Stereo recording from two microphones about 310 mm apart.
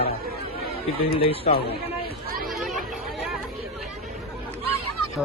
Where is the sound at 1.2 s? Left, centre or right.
Centre.